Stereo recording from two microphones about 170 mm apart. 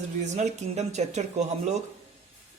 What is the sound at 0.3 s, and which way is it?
Speech, 45° right (ahead or behind).